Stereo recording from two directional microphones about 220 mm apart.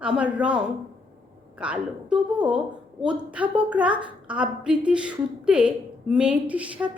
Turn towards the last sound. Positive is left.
turn(degrees=-5)  # may be behind; listen again after turning